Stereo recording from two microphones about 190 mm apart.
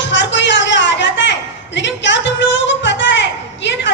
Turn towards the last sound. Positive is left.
turn(degrees=70)  # may be behind; listen again after turning